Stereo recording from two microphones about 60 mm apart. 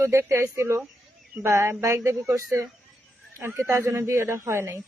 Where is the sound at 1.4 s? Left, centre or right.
Right.